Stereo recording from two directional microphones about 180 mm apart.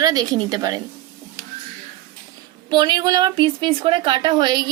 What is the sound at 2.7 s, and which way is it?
A woman's voice, 25° right (ahead or behind).